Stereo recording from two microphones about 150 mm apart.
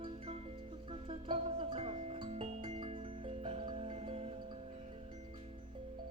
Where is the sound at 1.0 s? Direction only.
40° right (ahead or behind).